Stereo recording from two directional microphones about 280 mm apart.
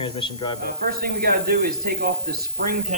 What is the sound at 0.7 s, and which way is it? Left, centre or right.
Speech, right.